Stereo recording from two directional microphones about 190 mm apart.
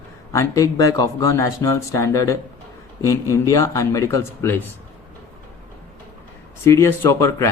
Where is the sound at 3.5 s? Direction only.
15° left (ahead or behind).